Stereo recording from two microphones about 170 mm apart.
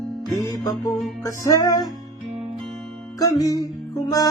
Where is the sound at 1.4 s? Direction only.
20° left (ahead or behind).